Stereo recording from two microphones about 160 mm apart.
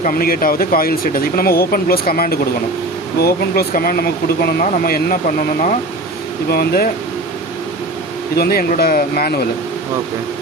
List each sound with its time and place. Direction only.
0.0 s speech: 65° left (ahead or behind)
6.5 s speech: 70° left (ahead or behind)
8.4 s speech: 70° left (ahead or behind)